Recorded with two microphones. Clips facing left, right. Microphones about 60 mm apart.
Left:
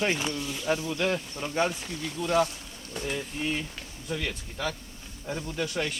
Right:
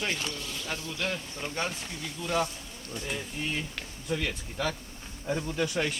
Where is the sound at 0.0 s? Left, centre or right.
Left.